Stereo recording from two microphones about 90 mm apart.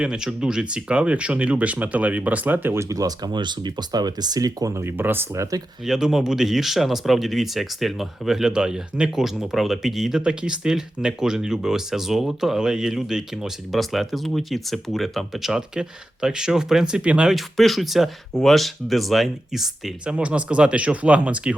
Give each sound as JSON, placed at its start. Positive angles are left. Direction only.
{"t": 0.0, "sound": "speech", "side_deg": -10}
{"t": 2.7, "sound": "speech", "side_deg": -40}
{"t": 4.8, "sound": "speech", "side_deg": -25}
{"t": 5.8, "sound": "speech", "side_deg": -5}
{"t": 17.3, "sound": "speech", "side_deg": 0}